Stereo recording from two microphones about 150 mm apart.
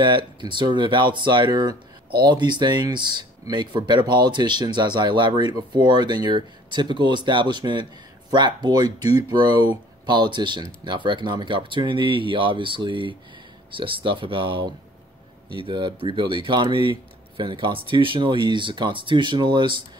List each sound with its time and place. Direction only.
0.0 s speech: 30° right (ahead or behind)